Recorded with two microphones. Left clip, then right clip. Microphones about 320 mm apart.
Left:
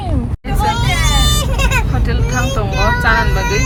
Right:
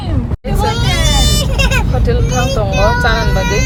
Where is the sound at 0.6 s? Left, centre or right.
Centre.